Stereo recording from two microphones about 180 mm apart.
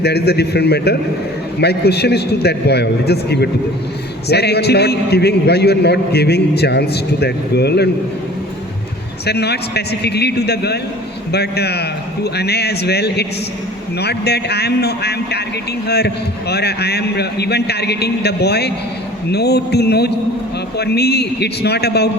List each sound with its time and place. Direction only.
0.0 s a man's voice: 65° left (ahead or behind)
9.2 s a man's voice: 65° left (ahead or behind)